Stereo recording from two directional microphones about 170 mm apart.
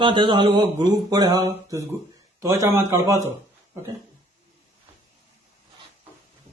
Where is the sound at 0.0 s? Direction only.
30° right (ahead or behind).